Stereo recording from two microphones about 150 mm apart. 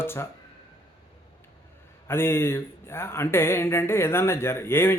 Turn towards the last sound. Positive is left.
turn(degrees=15)  # may be behind; listen again after turning